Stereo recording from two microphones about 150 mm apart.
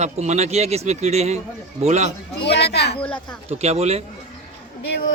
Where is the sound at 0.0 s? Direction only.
50° right (ahead or behind).